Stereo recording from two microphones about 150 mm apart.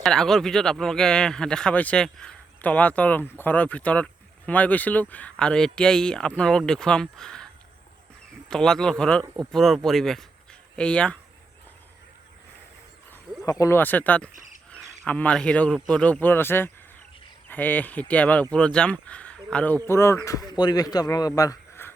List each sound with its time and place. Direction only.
0.0 s speech: centre (ahead or behind)
8.4 s speech: 5° left (ahead or behind)
13.4 s speech: 20° left (ahead or behind)